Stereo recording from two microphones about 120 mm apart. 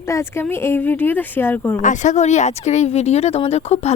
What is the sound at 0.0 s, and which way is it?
Speech, 20° left (ahead or behind).